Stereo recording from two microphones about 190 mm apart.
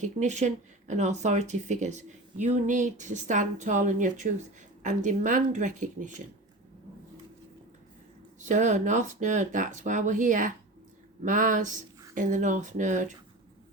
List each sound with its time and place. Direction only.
0.0 s speech: 40° right (ahead or behind)
8.4 s speech: 40° right (ahead or behind)